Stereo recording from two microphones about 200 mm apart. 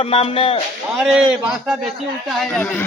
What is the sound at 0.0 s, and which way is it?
Speech, 30° left (ahead or behind).